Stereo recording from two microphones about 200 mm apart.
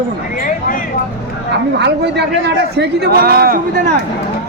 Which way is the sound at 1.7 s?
55° right (ahead or behind).